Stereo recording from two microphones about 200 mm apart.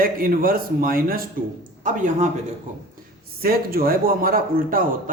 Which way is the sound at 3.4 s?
50° right (ahead or behind).